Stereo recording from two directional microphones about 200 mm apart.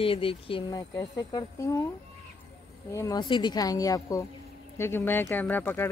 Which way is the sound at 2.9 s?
20° left (ahead or behind).